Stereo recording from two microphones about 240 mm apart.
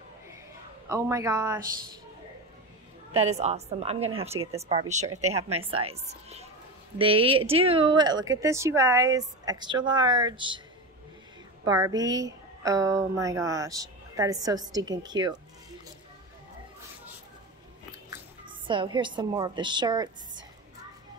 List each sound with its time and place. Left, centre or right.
0.8 s a woman's voice: centre
3.1 s a woman's voice: right
11.6 s a woman's voice: centre
18.1 s a woman's voice: centre